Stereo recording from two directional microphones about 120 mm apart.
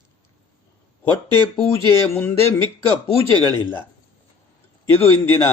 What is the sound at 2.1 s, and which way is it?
Speech, 20° left (ahead or behind).